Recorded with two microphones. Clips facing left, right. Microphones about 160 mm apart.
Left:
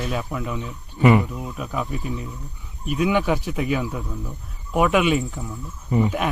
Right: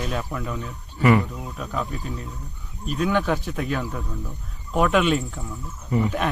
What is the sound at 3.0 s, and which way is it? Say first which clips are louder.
Speech: left 2 dB; 10° left (ahead or behind).